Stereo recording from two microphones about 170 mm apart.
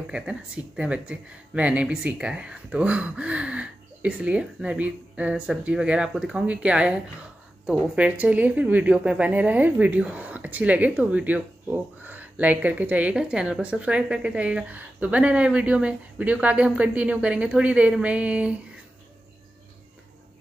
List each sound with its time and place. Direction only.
0.1 s speech: 5° right (ahead or behind)